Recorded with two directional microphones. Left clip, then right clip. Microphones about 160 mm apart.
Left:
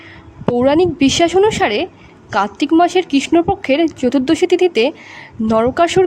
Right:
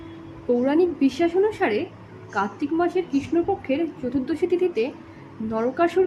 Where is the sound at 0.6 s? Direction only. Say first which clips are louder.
Left 10 dB; 70° left (ahead or behind).